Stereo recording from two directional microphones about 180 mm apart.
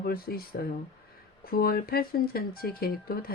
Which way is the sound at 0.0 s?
55° left (ahead or behind).